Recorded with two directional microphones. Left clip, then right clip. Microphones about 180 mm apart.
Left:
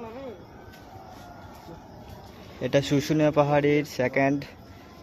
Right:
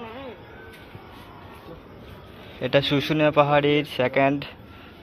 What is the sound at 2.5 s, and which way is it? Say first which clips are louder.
Speech: right 3 dB; 20° left (ahead or behind).